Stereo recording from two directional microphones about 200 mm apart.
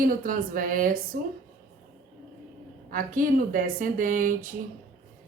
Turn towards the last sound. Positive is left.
turn(degrees=-40)  # may be behind; listen again after turning